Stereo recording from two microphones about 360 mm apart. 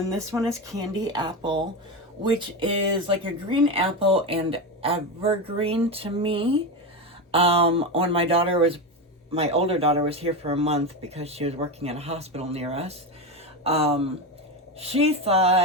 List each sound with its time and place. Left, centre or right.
0.0 s speech: centre
3.7 s speech: centre